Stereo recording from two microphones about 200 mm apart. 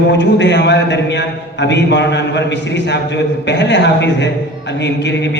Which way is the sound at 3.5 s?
60° left (ahead or behind).